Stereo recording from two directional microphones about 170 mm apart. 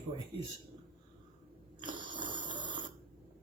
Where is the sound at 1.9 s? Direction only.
30° right (ahead or behind).